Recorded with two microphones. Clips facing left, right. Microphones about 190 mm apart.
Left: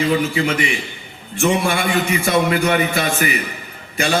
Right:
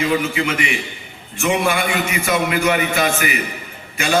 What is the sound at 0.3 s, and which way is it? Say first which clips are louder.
A man's voice: left 2 dB; 35° left (ahead or behind).